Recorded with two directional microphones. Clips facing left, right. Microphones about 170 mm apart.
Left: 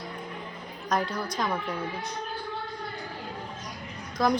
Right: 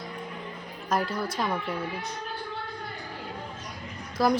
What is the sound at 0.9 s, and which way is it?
Speech, 5° right (ahead or behind).